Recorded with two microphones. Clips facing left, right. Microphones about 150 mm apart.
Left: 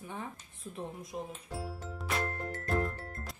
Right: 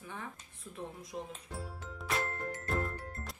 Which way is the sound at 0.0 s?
20° left (ahead or behind).